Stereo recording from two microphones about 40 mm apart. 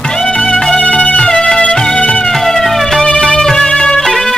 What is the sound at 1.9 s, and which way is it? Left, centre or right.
Music, left.